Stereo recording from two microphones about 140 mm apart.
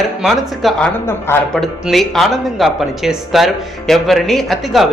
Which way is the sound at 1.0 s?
15° left (ahead or behind).